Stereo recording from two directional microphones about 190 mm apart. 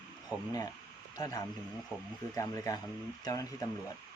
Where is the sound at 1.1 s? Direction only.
20° left (ahead or behind).